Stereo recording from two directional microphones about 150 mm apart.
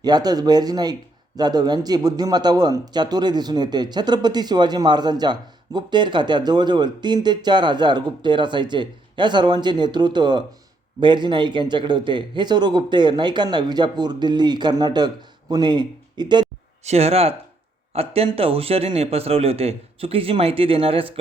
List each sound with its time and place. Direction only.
0.0 s speech: 25° right (ahead or behind)
16.8 s speech: 45° right (ahead or behind)